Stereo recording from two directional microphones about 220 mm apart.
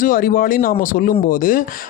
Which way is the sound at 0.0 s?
40° left (ahead or behind).